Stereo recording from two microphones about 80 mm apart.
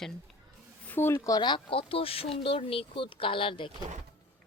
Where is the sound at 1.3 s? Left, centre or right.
Left.